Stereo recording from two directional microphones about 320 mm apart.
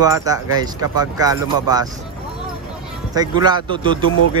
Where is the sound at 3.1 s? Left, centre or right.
Centre.